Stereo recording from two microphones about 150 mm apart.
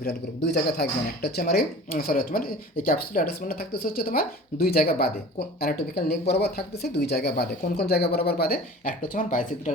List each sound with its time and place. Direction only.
0.0 s speech: 90° left; by 9.7 s 60° left (ahead or behind)